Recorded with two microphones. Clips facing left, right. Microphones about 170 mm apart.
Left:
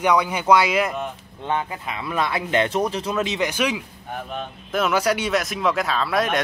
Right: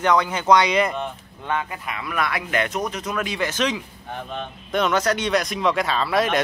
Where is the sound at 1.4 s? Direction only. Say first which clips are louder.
Left 1 dB; 25° left (ahead or behind).